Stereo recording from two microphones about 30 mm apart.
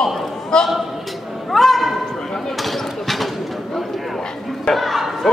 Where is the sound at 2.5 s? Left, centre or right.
Centre.